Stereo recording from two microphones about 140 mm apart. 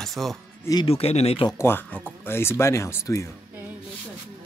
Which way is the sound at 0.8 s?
45° left (ahead or behind).